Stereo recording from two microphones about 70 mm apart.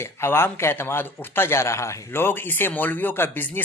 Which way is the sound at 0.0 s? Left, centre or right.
Left.